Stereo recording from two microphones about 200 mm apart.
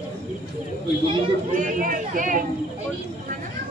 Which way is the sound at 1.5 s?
40° right (ahead or behind).